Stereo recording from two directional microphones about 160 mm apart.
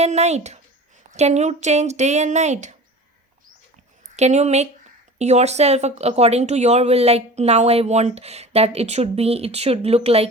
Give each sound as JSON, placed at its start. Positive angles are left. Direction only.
{"t": 0.0, "sound": "speech", "side_deg": -45}
{"t": 4.1, "sound": "speech", "side_deg": -45}